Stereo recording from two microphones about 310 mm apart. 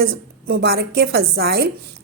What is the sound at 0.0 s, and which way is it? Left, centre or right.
A woman's voice, right.